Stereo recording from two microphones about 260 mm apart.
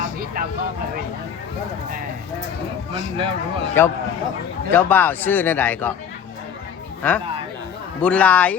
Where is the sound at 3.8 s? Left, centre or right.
Centre.